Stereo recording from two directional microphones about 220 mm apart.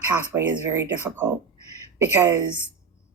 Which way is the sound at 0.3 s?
10° right (ahead or behind).